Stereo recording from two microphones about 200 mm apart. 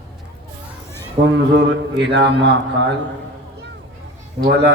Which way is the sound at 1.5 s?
65° right (ahead or behind).